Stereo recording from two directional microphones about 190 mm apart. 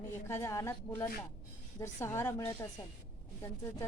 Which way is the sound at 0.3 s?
15° left (ahead or behind).